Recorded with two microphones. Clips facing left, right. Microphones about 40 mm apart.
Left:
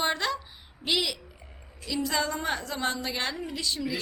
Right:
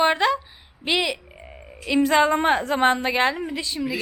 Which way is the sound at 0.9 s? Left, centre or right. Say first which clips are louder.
Right 5 dB; right.